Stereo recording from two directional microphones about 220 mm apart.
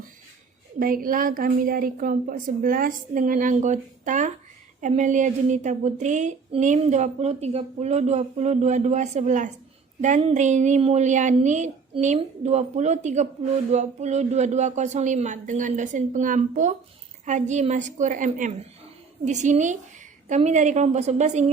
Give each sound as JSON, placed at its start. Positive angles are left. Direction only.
{"t": 0.8, "sound": "a woman's voice", "side_deg": -40}